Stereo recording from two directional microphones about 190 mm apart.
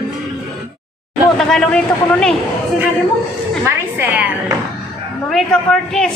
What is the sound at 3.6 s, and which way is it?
Speech, 10° right (ahead or behind).